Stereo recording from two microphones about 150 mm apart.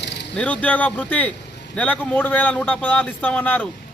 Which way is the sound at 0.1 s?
90° left.